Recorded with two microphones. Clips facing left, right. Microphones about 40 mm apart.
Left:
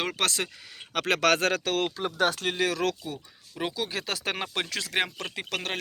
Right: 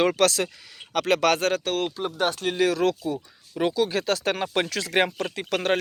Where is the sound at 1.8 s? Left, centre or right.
Left.